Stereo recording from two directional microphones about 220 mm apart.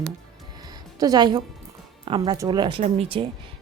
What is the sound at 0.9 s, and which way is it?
A woman's voice, 15° right (ahead or behind).